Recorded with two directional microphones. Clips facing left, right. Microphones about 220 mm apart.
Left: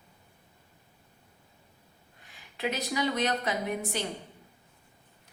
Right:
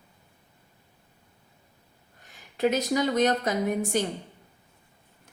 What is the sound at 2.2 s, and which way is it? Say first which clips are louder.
A woman's voice: right 8 dB; 45° right (ahead or behind).